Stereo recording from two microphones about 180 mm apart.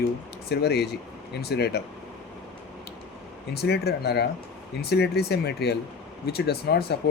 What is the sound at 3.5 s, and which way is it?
Speech, 65° left (ahead or behind).